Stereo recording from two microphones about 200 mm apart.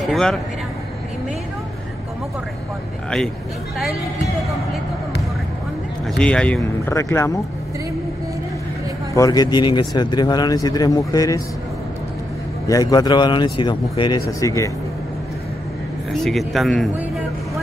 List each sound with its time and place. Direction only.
0.0 s speech: centre (ahead or behind)
6.1 s speech: 5° left (ahead or behind)
9.1 s speech: 15° left (ahead or behind)
12.6 s speech: 20° left (ahead or behind)
16.1 s speech: centre (ahead or behind)